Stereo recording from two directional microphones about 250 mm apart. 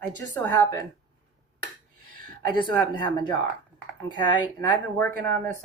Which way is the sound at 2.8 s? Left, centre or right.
Centre.